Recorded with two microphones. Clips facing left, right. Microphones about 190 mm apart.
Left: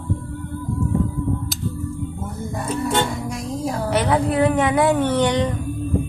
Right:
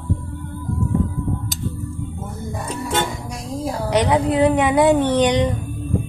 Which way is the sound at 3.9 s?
15° right (ahead or behind).